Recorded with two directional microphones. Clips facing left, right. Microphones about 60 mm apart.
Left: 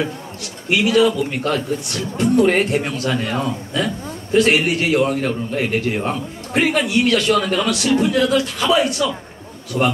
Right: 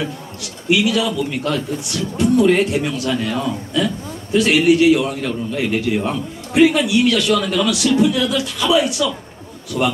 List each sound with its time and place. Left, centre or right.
0.7 s speech: left